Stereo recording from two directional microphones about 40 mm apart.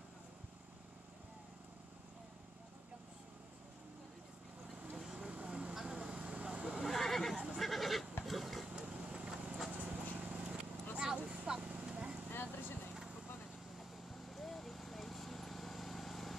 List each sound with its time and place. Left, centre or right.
4.9 s vehicle: centre
5.3 s vehicle: right
6.8 s neigh: centre
7.5 s goat: centre
8.3 s engine: centre
8.7 s vehicle: right
9.7 s vehicle: right
12.3 s vehicle: left
13.7 s horse: centre